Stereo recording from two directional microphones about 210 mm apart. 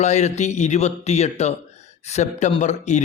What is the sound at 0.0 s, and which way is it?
Speech, 35° left (ahead or behind).